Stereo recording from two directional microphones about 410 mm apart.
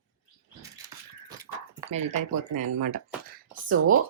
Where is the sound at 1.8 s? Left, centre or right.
Centre.